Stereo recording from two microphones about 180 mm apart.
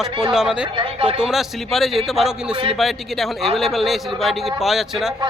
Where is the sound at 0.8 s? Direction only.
30° right (ahead or behind).